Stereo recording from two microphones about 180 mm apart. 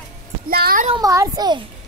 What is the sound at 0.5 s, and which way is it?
Speech, 60° right (ahead or behind).